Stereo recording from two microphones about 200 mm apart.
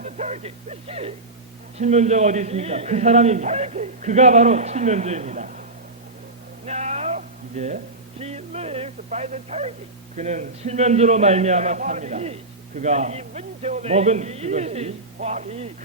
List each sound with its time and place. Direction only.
0.0 s a man's voice: 35° right (ahead or behind)
6.7 s music: 35° right (ahead or behind)
8.2 s a man's voice: 30° right (ahead or behind)